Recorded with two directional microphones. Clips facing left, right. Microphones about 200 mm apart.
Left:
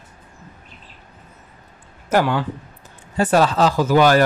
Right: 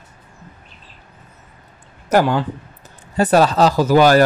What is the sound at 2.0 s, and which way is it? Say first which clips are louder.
Speech: right 3 dB; 40° right (ahead or behind).